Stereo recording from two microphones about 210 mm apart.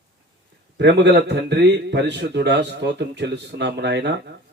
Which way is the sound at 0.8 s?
55° right (ahead or behind).